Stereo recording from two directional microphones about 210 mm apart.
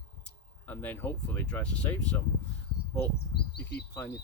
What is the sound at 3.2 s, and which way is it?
Speech, 50° left (ahead or behind).